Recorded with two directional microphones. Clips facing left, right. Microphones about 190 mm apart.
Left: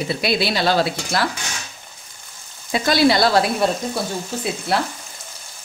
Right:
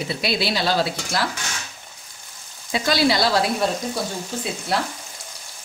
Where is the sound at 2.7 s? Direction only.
50° left (ahead or behind).